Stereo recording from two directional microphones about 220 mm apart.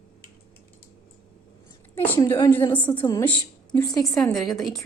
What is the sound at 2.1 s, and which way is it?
A woman's voice, 10° left (ahead or behind).